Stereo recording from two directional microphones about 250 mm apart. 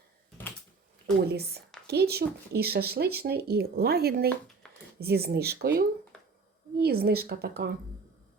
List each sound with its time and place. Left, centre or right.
1.2 s speech: right